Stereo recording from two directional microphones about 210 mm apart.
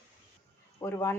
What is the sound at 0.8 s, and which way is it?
Speech, 15° left (ahead or behind).